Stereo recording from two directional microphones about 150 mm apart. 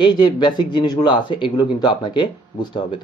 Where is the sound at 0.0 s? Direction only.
30° left (ahead or behind).